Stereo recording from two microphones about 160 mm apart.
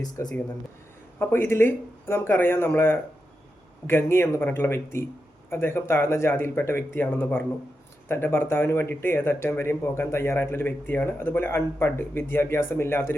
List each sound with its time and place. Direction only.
0.2 s speech: 15° left (ahead or behind)